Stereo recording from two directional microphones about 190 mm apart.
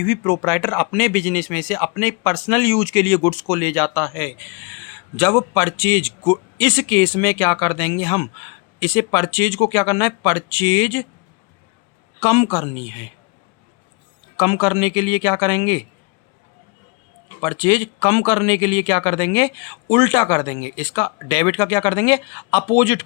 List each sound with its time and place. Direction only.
0.0 s speech: 10° left (ahead or behind)
12.2 s speech: 20° left (ahead or behind)
14.3 s speech: 20° left (ahead or behind)
17.4 s speech: 20° left (ahead or behind)